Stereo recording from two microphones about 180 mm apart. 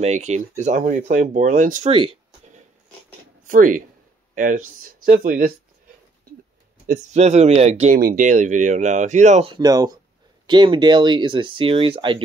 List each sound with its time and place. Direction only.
0.0 s speech: 40° right (ahead or behind)
1.9 s a sound: 35° right (ahead or behind)
3.4 s speech: 45° right (ahead or behind)
6.9 s speech: 40° right (ahead or behind)
8.0 s speech: 50° right (ahead or behind)
9.5 s speech: 20° right (ahead or behind)